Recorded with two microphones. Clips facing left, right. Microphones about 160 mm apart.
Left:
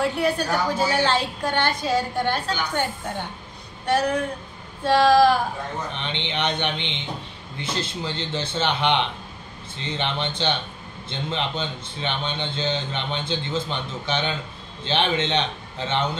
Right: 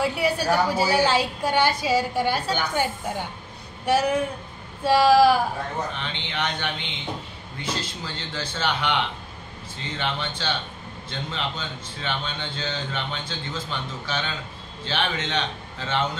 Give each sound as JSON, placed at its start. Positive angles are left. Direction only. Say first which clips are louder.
{"t": 0.0, "sound": "a woman's voice", "louder": "left 1 dB", "side_deg": -5}
{"t": 5.9, "sound": "a man's voice", "louder": "left 2 dB", "side_deg": 25}